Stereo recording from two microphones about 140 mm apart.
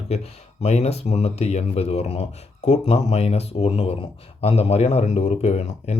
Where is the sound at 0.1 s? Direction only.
50° left (ahead or behind).